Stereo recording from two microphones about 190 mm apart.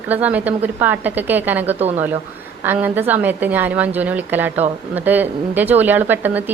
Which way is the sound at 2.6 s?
10° right (ahead or behind).